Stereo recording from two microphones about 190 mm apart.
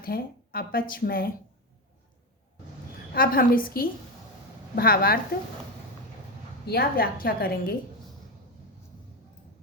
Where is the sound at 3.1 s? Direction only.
50° left (ahead or behind).